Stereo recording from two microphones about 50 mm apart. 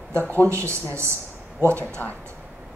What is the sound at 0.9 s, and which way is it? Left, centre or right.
Speech, right.